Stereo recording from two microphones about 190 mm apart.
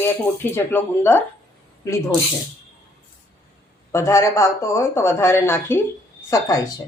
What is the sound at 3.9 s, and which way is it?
Speech, 15° left (ahead or behind).